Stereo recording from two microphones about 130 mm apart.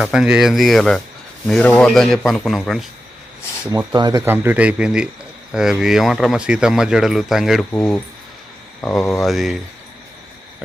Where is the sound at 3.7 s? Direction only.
30° right (ahead or behind).